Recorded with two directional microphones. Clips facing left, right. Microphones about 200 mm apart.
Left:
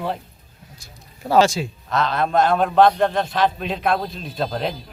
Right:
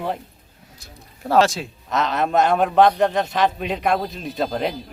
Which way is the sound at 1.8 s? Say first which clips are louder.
Right 1 dB; 20° right (ahead or behind).